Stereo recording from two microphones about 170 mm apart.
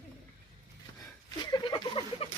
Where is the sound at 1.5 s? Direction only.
30° left (ahead or behind).